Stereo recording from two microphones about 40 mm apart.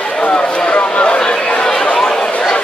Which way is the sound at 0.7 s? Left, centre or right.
Left.